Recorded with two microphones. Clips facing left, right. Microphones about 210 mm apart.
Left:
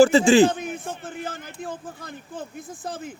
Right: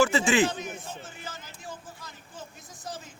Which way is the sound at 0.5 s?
55° left (ahead or behind).